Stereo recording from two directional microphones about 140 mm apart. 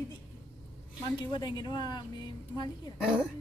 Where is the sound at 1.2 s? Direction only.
30° left (ahead or behind).